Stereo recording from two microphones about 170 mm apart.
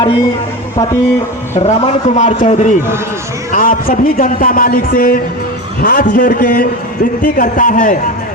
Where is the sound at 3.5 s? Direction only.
55° left (ahead or behind).